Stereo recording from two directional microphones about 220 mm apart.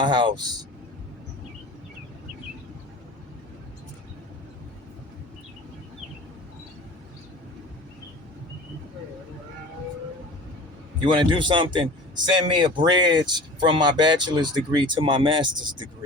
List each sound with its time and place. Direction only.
0.0 s speech: 20° right (ahead or behind)
11.0 s speech: 20° right (ahead or behind)